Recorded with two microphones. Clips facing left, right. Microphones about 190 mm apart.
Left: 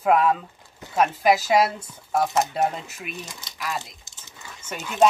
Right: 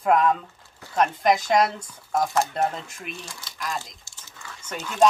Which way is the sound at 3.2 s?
20° left (ahead or behind).